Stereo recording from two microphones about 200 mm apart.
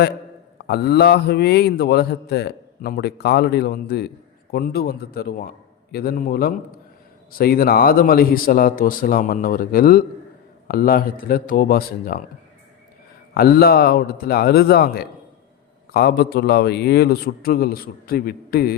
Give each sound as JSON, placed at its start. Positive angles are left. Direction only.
{"t": 0.6, "sound": "a man's voice", "side_deg": 55}
{"t": 13.3, "sound": "a man's voice", "side_deg": 50}